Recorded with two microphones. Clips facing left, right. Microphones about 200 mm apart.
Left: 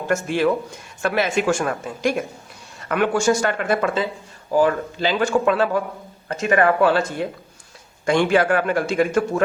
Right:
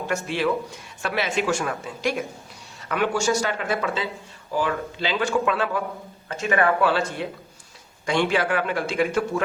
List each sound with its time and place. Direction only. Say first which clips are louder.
0.1 s a man's voice: left 5 dB; 45° left (ahead or behind)